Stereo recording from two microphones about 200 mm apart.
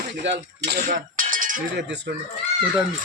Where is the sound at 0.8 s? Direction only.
40° right (ahead or behind).